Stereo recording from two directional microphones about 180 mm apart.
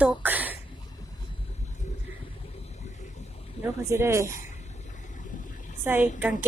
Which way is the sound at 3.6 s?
15° right (ahead or behind).